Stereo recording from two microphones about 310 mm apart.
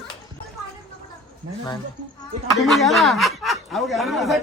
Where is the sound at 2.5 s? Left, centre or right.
Centre.